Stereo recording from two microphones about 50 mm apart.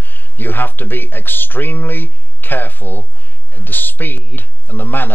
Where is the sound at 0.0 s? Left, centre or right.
Left.